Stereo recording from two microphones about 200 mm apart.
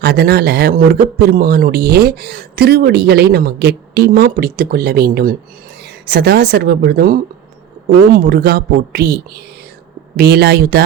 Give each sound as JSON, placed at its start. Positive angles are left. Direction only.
{"t": 0.0, "sound": "speech", "side_deg": -50}